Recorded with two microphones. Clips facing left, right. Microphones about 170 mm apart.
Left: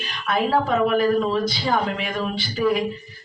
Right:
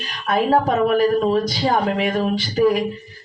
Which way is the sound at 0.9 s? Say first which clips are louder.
Right 3 dB; 40° right (ahead or behind).